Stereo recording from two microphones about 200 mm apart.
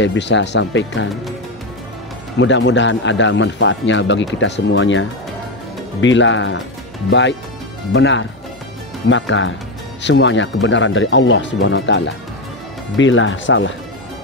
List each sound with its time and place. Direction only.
0.0 s speech: 65° left (ahead or behind)
2.3 s speech: 65° left (ahead or behind)